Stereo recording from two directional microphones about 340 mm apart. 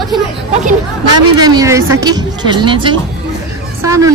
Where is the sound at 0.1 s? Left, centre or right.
Centre.